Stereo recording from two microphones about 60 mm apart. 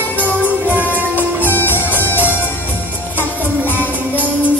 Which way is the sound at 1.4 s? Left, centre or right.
Left.